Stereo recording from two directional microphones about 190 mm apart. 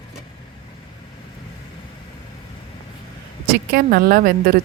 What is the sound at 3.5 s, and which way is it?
Speech, 55° right (ahead or behind).